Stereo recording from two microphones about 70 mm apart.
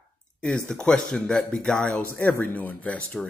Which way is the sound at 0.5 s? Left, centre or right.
Centre.